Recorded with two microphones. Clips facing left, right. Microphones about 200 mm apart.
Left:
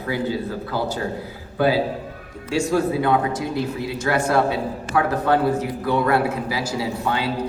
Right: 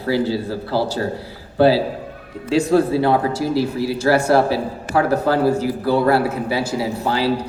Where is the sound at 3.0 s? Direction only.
35° right (ahead or behind).